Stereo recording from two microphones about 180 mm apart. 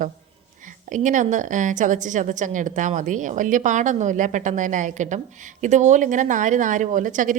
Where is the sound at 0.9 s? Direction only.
45° right (ahead or behind).